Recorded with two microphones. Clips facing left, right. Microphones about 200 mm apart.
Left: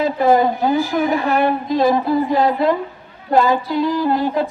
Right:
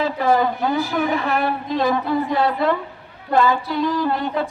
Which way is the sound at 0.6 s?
35° left (ahead or behind).